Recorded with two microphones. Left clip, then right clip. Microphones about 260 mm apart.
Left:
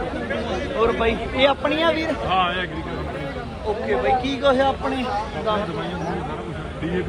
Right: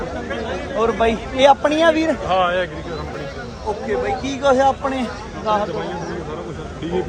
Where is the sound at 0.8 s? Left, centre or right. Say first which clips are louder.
Right 3 dB; right.